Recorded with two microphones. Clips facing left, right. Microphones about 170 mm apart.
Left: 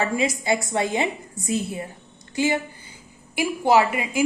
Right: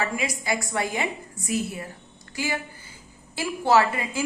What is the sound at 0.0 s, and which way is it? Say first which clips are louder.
A woman's voice: left 5 dB; 25° left (ahead or behind).